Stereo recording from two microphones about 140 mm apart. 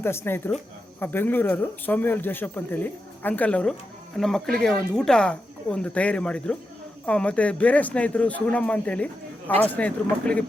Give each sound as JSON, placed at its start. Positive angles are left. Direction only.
{"t": 0.0, "sound": "speech", "side_deg": 15}